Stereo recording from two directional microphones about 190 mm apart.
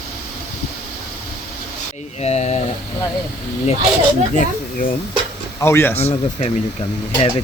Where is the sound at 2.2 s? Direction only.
35° left (ahead or behind).